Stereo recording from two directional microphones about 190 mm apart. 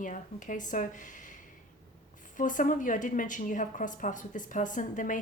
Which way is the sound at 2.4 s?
45° left (ahead or behind).